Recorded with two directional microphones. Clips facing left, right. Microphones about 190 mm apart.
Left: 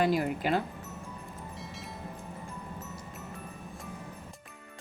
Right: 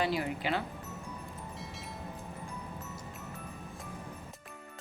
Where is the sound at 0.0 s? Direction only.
50° left (ahead or behind).